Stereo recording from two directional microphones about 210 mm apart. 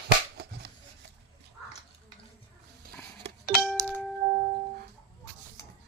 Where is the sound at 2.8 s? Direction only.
45° right (ahead or behind).